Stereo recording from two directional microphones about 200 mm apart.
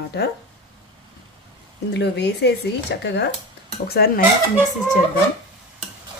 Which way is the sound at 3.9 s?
50° left (ahead or behind).